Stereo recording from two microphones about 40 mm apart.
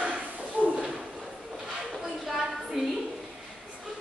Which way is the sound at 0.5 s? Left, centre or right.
Right.